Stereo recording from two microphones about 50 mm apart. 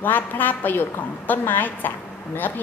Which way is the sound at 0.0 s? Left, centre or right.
Left.